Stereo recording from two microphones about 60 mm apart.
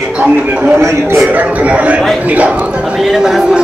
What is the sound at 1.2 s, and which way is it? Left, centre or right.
Speech, right.